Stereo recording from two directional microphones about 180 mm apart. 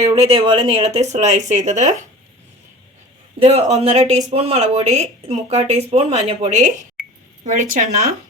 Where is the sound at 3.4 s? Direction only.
35° right (ahead or behind).